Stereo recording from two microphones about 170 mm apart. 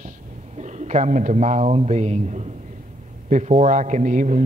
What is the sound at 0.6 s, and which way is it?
A man's voice, 45° right (ahead or behind).